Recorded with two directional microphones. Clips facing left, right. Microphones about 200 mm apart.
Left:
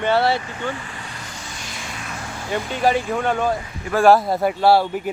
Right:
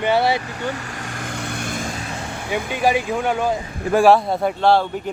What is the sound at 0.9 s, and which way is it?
Vehicle, 45° right (ahead or behind).